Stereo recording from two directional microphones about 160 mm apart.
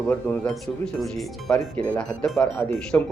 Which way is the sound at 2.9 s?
15° left (ahead or behind).